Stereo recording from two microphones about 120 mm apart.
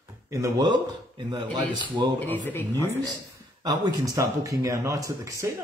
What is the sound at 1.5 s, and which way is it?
Speech, 35° right (ahead or behind).